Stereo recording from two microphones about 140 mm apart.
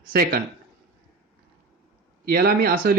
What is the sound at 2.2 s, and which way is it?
Speech, 90° right.